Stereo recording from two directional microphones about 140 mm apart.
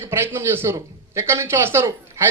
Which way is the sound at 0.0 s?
15° right (ahead or behind).